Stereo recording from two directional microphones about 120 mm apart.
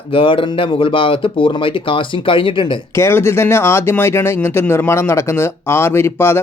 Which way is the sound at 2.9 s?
20° left (ahead or behind).